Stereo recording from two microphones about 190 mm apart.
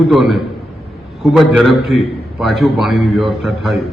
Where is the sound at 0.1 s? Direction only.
Centre (ahead or behind).